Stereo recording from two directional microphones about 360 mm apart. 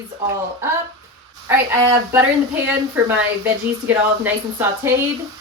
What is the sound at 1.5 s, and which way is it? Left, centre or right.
Speech, centre.